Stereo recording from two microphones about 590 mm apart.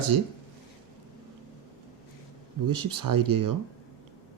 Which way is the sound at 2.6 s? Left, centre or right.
Right.